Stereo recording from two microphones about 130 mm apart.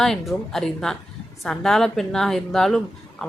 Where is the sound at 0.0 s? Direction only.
5° left (ahead or behind).